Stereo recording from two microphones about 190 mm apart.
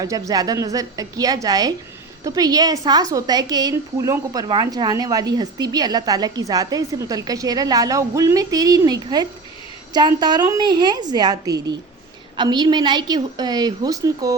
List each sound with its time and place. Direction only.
0.0 s a woman's voice: 20° right (ahead or behind)